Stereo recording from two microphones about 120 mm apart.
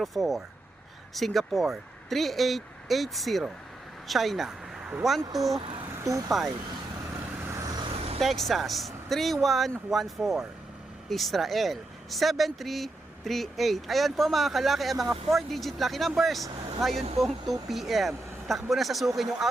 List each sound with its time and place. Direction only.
0.0 s speech: centre (ahead or behind)
7.4 s vehicle: 25° right (ahead or behind)
8.2 s speech: centre (ahead or behind)
16.9 s speech: 70° right (ahead or behind)
17.2 s speech: centre (ahead or behind)